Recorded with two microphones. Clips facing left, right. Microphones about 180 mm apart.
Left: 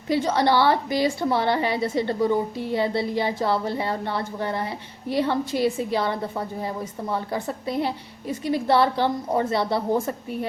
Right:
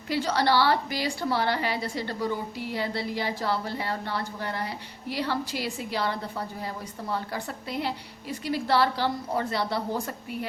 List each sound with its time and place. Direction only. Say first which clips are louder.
0.1 s a woman's voice: left 4 dB; 20° left (ahead or behind)